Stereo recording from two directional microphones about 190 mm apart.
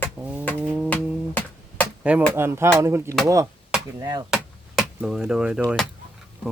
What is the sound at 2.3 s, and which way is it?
Speech, 10° right (ahead or behind).